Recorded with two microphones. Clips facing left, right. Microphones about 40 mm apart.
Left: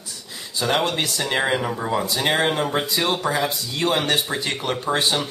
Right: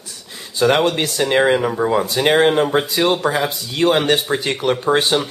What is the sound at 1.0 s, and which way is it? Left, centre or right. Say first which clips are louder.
Speech: right 6 dB; right.